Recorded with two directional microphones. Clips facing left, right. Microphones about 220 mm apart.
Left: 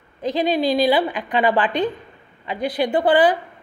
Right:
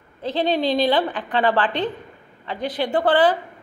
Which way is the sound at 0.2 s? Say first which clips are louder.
Left 2 dB; 15° left (ahead or behind).